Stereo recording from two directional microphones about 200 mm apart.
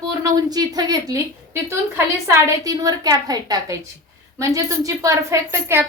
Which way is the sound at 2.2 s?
20° right (ahead or behind).